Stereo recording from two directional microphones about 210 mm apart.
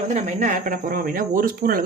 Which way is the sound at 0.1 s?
35° right (ahead or behind).